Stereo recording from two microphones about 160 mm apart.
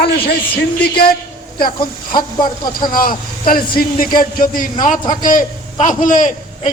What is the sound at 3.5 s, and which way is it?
A man's voice, 65° left (ahead or behind).